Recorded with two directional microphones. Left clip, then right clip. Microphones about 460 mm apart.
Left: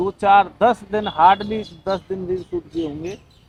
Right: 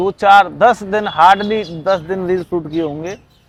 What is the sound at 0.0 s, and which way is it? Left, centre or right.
A man's voice, right.